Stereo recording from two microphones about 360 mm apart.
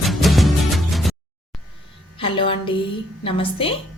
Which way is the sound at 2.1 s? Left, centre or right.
Centre.